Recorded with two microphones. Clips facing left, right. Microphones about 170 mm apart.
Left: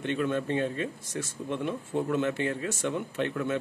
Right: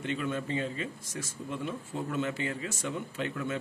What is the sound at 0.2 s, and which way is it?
Speech, 60° left (ahead or behind).